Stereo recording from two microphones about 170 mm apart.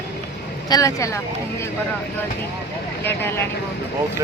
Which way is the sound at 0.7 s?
20° left (ahead or behind).